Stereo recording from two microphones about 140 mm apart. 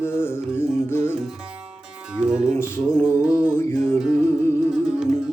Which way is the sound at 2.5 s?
15° left (ahead or behind).